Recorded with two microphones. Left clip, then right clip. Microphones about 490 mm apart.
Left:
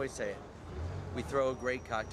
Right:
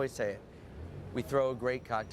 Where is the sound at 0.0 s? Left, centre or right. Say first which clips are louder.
Right 3 dB; right.